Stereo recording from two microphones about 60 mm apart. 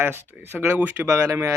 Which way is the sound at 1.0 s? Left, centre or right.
Right.